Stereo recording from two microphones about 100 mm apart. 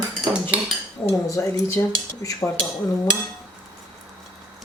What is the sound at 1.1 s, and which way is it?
Speech, 30° left (ahead or behind).